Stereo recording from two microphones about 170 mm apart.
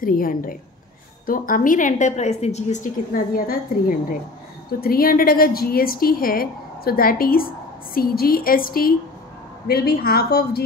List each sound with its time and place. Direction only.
0.0 s a woman's voice: 55° left (ahead or behind)